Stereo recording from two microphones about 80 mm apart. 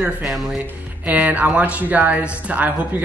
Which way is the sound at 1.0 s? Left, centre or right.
Centre.